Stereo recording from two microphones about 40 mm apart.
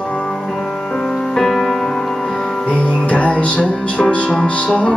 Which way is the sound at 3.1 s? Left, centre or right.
Left.